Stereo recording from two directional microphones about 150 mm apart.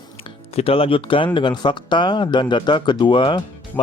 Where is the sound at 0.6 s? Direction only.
40° left (ahead or behind).